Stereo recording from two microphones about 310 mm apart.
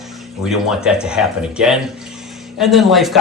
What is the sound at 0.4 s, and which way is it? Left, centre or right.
Speech, centre.